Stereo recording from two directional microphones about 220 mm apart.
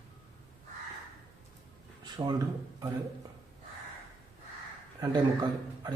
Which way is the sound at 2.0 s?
20° right (ahead or behind).